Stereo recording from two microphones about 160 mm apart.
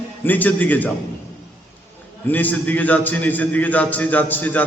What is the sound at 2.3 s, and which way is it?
A man's voice, 10° left (ahead or behind).